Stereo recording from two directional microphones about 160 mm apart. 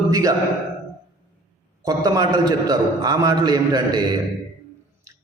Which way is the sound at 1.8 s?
25° right (ahead or behind).